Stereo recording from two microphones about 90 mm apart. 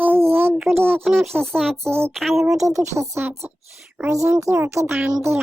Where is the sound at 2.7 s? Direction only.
35° right (ahead or behind).